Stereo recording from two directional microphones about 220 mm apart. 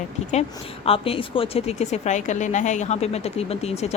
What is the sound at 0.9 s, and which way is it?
A woman's voice, 25° left (ahead or behind).